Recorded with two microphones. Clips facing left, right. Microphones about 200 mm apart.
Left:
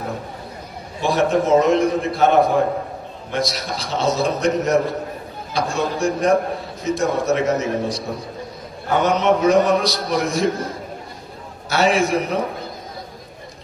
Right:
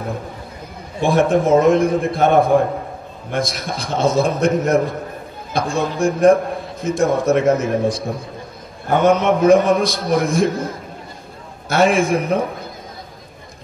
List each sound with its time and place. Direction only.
1.0 s a man's voice: 50° right (ahead or behind)
11.7 s a man's voice: 50° right (ahead or behind)